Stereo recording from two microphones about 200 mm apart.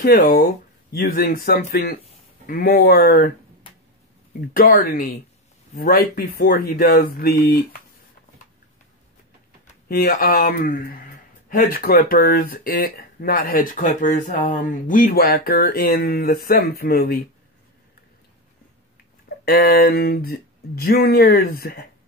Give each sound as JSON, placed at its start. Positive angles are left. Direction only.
{"t": 0.0, "sound": "speech", "side_deg": 45}
{"t": 4.6, "sound": "speech", "side_deg": 45}
{"t": 9.8, "sound": "speech", "side_deg": 50}
{"t": 19.4, "sound": "speech", "side_deg": 50}